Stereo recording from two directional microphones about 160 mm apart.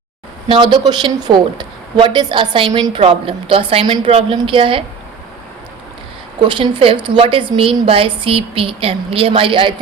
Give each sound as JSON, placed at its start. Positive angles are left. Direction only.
{"t": 0.4, "sound": "a woman's voice", "side_deg": -30}
{"t": 6.4, "sound": "a woman's voice", "side_deg": -30}